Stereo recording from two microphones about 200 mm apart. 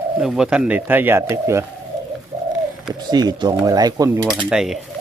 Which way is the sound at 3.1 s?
20° right (ahead or behind).